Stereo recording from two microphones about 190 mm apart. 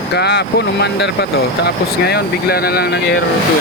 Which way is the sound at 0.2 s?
60° left (ahead or behind).